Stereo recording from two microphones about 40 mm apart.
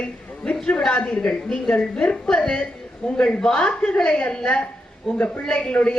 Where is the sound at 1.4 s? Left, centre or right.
Left.